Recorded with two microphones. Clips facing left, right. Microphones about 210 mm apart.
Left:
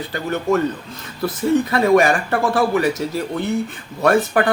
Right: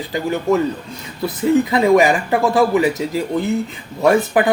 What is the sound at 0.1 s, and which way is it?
Speech, 10° right (ahead or behind).